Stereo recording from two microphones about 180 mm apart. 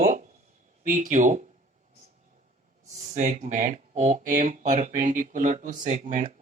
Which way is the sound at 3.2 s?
40° right (ahead or behind).